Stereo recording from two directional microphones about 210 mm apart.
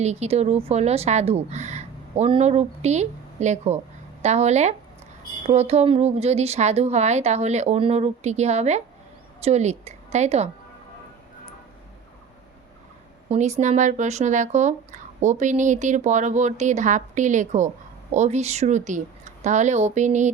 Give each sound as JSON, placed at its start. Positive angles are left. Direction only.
{"t": 0.0, "sound": "speech", "side_deg": -30}
{"t": 13.2, "sound": "speech", "side_deg": -30}